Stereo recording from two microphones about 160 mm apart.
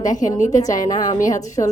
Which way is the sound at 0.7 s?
55° left (ahead or behind).